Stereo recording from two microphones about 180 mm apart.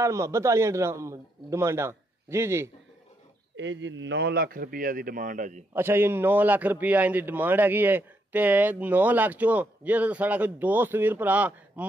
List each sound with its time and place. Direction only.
0.0 s a man's voice: 15° right (ahead or behind)
3.5 s a man's voice: 90° right; by 5.6 s 45° right (ahead or behind)
5.7 s a man's voice: 10° right (ahead or behind)